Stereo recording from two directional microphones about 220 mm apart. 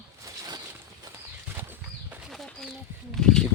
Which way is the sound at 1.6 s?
10° right (ahead or behind).